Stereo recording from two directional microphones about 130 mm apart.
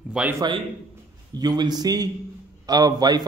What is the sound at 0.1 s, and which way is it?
Speech, 10° right (ahead or behind).